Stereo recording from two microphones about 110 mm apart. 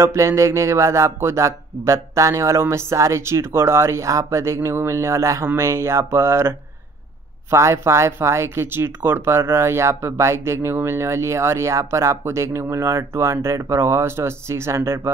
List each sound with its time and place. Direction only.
0.0 s speech: 25° right (ahead or behind)
7.5 s speech: 25° right (ahead or behind)